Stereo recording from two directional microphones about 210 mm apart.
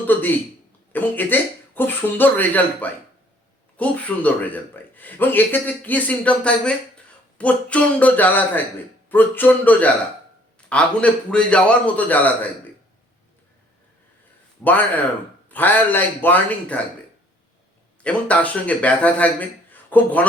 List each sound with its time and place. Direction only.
0.1 s a man's voice: 10° left (ahead or behind)
14.6 s a man's voice: 10° left (ahead or behind)
18.0 s a man's voice: 5° left (ahead or behind)